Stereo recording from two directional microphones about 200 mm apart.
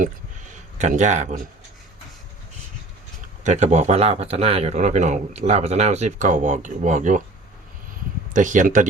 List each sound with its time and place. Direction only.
0.8 s speech: 35° right (ahead or behind)
3.4 s speech: 35° right (ahead or behind)
8.3 s speech: 40° right (ahead or behind)